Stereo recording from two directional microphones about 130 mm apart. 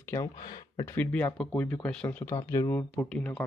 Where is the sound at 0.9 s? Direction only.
10° left (ahead or behind).